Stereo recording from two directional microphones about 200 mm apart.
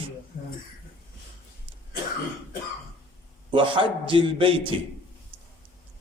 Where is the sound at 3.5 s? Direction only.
25° right (ahead or behind).